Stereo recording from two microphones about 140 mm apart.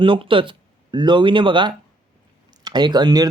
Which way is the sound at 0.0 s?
40° right (ahead or behind).